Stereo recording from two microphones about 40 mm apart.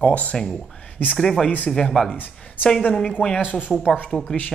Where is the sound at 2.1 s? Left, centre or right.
Left.